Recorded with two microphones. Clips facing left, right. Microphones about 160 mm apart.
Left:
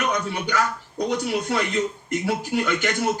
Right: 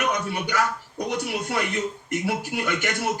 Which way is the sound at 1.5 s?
15° right (ahead or behind).